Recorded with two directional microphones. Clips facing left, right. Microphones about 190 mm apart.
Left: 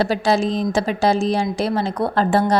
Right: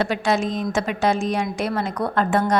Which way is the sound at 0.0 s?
35° left (ahead or behind).